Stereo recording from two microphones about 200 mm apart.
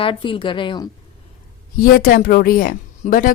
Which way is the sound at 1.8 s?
45° left (ahead or behind).